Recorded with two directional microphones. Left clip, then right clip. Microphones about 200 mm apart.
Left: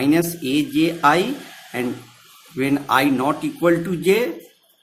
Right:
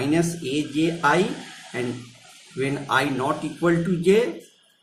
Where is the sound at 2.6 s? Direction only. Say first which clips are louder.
Left 4 dB; 45° left (ahead or behind).